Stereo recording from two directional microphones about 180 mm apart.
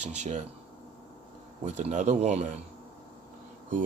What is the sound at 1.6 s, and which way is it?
Speech, 40° right (ahead or behind).